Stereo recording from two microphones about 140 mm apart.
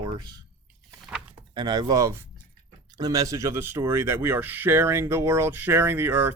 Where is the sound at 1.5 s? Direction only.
30° right (ahead or behind).